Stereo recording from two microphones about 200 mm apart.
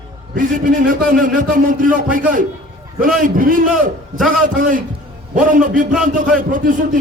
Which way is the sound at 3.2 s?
45° right (ahead or behind).